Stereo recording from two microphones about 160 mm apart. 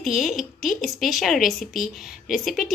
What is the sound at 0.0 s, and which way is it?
A woman's voice, centre (ahead or behind).